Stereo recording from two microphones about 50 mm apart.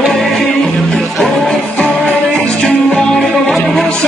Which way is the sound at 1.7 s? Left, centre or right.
Left.